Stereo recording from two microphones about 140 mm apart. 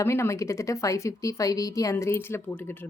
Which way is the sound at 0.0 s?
20° left (ahead or behind).